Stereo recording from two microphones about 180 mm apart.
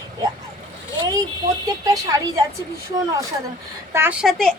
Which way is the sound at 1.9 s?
20° right (ahead or behind).